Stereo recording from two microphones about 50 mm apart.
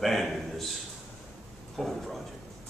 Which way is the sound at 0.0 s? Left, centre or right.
Centre.